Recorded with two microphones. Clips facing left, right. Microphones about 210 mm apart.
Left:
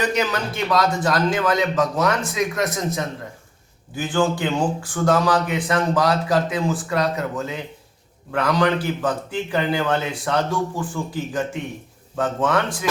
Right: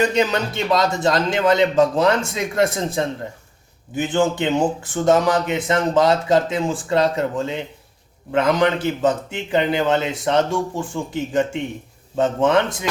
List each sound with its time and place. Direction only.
0.0 s speech: 25° right (ahead or behind)